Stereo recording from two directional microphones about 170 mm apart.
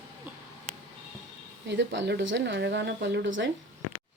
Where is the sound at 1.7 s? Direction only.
90° right.